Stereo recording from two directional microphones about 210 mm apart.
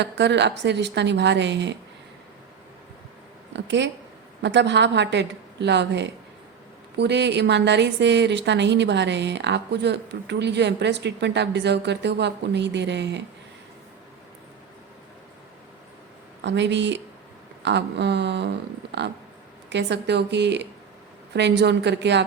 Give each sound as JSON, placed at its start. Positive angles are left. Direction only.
{"t": 0.0, "sound": "a woman's voice", "side_deg": -55}
{"t": 3.5, "sound": "a woman's voice", "side_deg": -55}
{"t": 16.4, "sound": "a woman's voice", "side_deg": -55}